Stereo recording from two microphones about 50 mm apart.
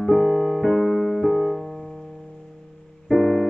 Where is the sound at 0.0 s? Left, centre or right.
Centre.